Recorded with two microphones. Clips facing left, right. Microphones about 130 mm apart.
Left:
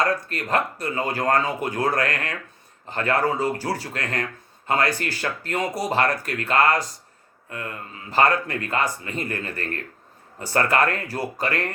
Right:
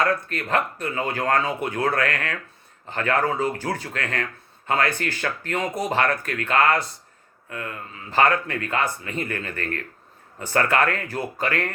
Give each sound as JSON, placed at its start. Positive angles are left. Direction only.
{"t": 0.3, "sound": "speech", "side_deg": 35}
{"t": 1.4, "sound": "speech", "side_deg": 15}
{"t": 1.6, "sound": "speech", "side_deg": 35}